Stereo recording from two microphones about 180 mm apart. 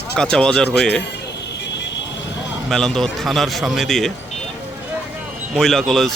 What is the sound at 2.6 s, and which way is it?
Speech, 5° left (ahead or behind).